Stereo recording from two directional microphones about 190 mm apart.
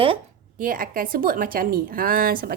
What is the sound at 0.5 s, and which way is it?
Speech, 45° right (ahead or behind).